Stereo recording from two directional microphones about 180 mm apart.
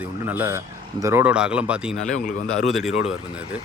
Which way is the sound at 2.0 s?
45° left (ahead or behind).